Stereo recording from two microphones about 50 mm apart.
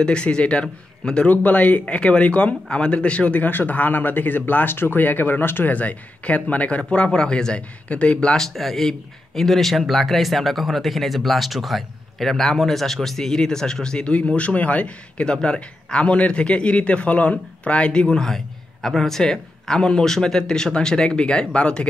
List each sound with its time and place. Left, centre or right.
0.0 s a man's voice: centre
1.3 s speech: left
6.8 s a man's voice: centre
8.4 s a man's voice: centre